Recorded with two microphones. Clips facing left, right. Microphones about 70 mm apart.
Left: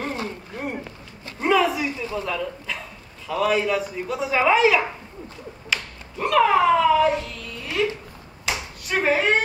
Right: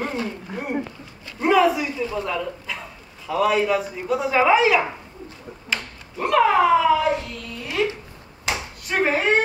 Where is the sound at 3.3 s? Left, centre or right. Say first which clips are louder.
Right 2 dB; centre.